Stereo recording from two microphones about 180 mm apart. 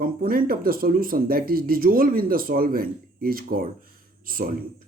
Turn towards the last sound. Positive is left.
turn(degrees=-55)  # may be behind; listen again after turning